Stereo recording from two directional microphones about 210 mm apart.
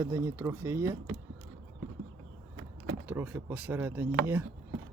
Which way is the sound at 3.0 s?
10° right (ahead or behind).